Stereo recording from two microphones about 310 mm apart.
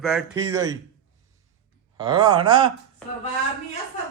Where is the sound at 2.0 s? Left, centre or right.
Centre.